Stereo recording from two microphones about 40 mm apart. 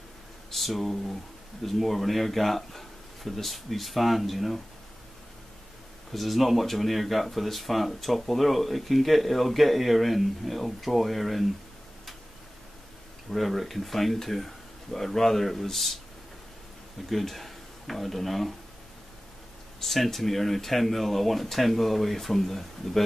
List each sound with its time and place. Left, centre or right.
0.5 s speech: centre
6.1 s speech: centre
13.3 s speech: centre
17.1 s speech: centre
19.8 s speech: centre